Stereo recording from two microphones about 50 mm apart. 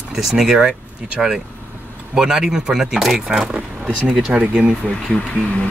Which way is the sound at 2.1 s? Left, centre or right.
Centre.